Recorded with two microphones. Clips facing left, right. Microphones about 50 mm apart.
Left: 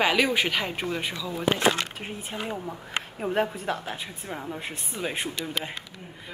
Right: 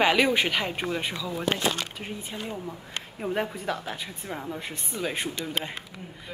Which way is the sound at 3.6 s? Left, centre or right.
Centre.